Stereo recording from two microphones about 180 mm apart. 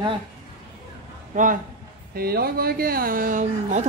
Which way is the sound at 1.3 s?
45° right (ahead or behind).